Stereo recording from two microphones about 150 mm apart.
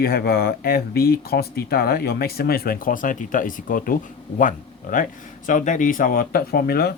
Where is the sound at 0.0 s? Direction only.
90° left.